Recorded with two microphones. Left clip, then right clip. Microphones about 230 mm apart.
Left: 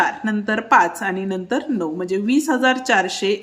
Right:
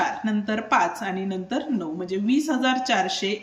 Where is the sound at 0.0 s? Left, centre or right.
Centre.